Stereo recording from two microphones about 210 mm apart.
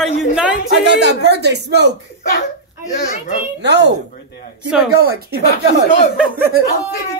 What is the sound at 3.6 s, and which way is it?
Speech, 55° right (ahead or behind).